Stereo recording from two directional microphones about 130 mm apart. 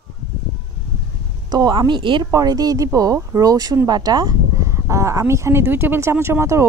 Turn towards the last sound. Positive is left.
turn(degrees=-20)  # may be behind; listen again after turning